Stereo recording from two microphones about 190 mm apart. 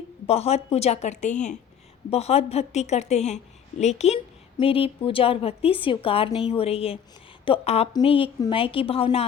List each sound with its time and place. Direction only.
0.3 s a woman's voice: 35° left (ahead or behind)